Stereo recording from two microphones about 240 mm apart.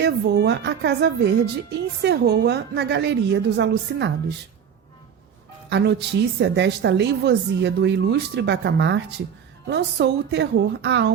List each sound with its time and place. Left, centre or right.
0.0 s a woman's voice: right
5.6 s a woman's voice: right